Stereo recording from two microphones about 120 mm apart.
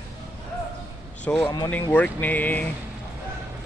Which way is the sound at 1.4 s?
35° left (ahead or behind).